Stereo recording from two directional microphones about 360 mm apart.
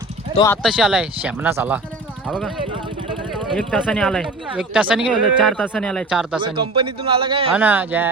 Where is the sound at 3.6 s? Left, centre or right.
Centre.